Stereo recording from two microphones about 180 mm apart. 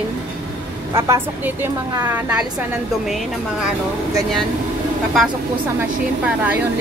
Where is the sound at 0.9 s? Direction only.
15° right (ahead or behind).